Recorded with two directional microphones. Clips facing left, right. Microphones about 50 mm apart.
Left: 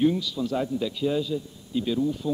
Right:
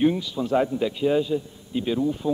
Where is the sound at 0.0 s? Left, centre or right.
Right.